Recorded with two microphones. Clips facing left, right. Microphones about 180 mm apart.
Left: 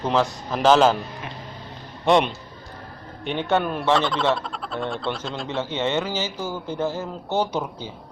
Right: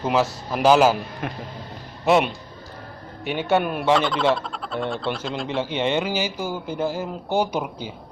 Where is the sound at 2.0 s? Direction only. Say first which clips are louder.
Even; 5° right (ahead or behind).